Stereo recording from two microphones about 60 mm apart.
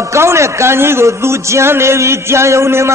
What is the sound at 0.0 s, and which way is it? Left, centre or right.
A man's voice, right.